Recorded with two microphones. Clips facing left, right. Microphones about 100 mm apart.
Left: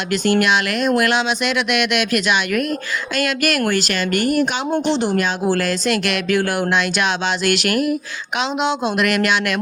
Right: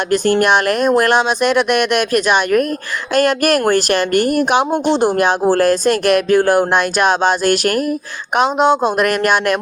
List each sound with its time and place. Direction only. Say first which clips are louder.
0.1 s speech: right 3 dB; 40° right (ahead or behind)